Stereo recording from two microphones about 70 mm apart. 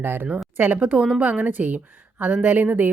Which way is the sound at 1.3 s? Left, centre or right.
Right.